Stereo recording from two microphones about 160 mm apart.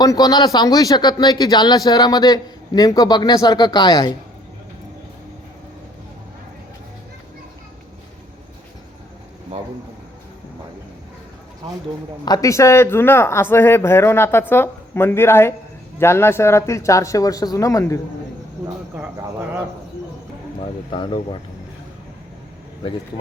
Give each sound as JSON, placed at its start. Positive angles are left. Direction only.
{"t": 0.0, "sound": "speech", "side_deg": 25}
{"t": 12.2, "sound": "speech", "side_deg": 25}
{"t": 18.9, "sound": "speech", "side_deg": -10}
{"t": 20.9, "sound": "speech", "side_deg": 30}